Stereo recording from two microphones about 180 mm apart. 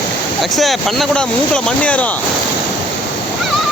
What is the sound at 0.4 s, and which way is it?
Speech, centre (ahead or behind).